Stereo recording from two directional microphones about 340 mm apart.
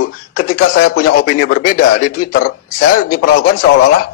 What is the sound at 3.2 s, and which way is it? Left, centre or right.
Speech, left.